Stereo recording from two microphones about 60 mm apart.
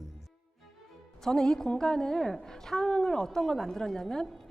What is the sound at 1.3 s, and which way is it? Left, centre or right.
A woman's voice, centre.